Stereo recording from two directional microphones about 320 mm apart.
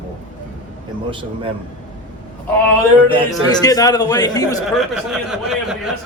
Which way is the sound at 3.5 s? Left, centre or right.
Centre.